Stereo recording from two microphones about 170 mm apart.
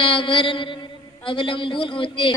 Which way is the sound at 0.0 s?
30° left (ahead or behind).